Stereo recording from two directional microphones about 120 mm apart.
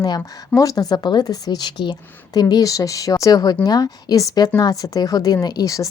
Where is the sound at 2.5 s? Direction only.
30° left (ahead or behind).